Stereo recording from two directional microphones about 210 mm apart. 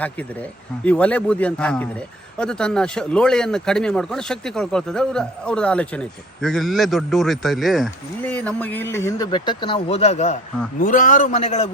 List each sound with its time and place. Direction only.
0.0 s a man's voice: 5° left (ahead or behind); by 11.7 s 35° left (ahead or behind)